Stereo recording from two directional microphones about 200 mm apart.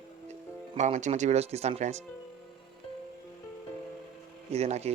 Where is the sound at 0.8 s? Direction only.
35° right (ahead or behind).